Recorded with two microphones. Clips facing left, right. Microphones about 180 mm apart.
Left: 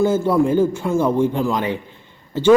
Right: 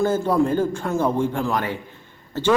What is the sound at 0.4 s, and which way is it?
A man's voice, 15° left (ahead or behind).